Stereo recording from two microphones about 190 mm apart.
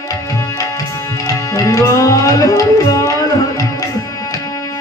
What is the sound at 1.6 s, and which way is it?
Music, 20° left (ahead or behind).